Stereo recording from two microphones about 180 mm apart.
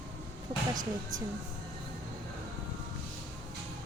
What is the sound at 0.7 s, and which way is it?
Speech, 20° right (ahead or behind).